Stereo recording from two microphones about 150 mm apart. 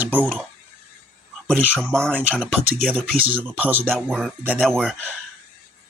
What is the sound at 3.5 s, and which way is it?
Speech, 10° right (ahead or behind).